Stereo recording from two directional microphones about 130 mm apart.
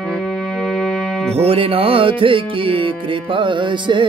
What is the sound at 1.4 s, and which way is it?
Music, 50° right (ahead or behind).